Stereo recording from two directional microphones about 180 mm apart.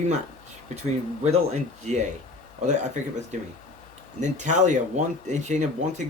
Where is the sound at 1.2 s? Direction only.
40° right (ahead or behind).